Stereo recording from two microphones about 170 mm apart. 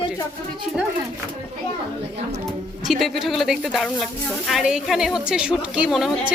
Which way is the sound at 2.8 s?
Centre (ahead or behind).